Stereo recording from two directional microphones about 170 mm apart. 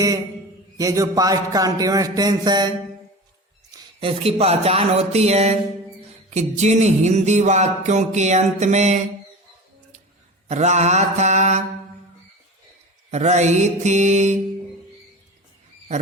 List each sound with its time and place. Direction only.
0.8 s a sound: 20° right (ahead or behind)
3.7 s music: 35° right (ahead or behind)
10.5 s music: 45° right (ahead or behind)
13.1 s music: 40° right (ahead or behind)